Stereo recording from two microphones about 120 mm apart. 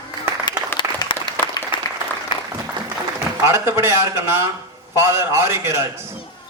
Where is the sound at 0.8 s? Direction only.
40° left (ahead or behind).